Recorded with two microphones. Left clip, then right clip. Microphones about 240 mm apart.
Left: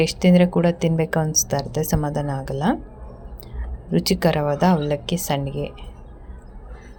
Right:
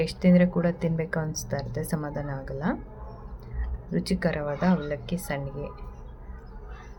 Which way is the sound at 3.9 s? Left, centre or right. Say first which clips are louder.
Left 8 dB; centre.